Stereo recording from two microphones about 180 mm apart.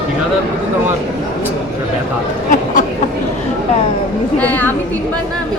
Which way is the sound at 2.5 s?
45° left (ahead or behind).